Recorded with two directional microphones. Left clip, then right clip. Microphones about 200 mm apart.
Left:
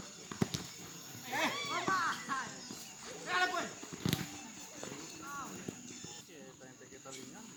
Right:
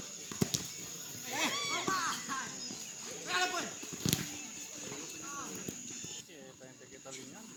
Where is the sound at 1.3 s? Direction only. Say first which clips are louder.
Right 1 dB; 5° right (ahead or behind).